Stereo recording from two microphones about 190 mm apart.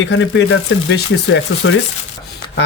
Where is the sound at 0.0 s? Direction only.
70° left (ahead or behind).